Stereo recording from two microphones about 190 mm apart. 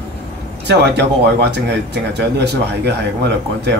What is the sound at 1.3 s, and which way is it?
Speech, 60° right (ahead or behind).